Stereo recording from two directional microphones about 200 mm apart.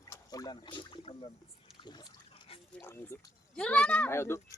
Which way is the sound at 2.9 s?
10° left (ahead or behind).